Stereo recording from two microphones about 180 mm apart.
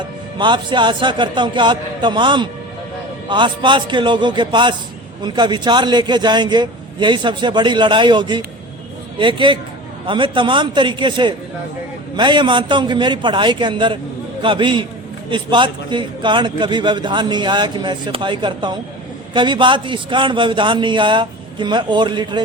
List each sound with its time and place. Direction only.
0.3 s a man's voice: 25° right (ahead or behind)